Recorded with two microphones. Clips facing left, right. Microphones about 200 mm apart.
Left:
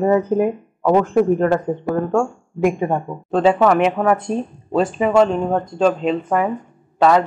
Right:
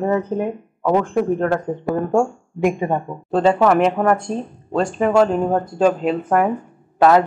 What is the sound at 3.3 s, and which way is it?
Speech, centre (ahead or behind).